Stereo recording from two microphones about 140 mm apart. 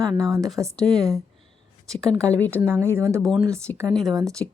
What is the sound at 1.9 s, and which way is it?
A woman's voice, 20° right (ahead or behind).